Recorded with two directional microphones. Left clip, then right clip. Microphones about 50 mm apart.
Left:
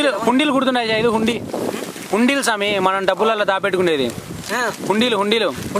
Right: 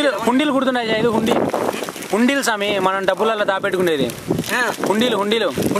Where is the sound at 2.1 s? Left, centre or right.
Centre.